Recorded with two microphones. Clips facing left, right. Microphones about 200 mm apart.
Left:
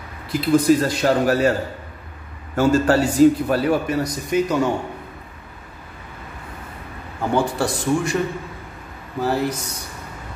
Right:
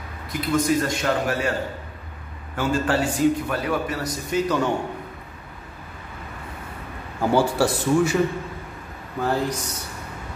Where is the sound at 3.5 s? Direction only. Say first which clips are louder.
Left 6 dB; 30° left (ahead or behind).